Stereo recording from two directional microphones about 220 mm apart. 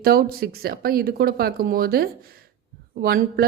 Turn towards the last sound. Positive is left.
turn(degrees=-40)  # may be behind; listen again after turning